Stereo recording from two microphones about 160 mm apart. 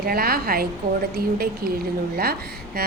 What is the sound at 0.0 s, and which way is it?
A woman's voice, 70° right (ahead or behind).